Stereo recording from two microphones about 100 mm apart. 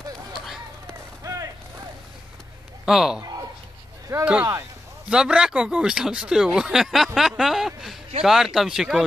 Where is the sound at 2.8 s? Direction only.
5° right (ahead or behind).